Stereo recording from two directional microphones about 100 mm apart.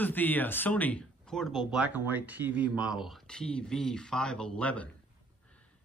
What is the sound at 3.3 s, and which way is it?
Speech, 10° left (ahead or behind).